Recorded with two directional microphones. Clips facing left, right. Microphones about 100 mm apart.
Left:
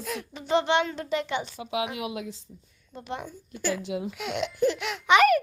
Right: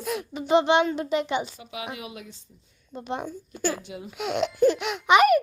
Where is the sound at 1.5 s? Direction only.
90° left.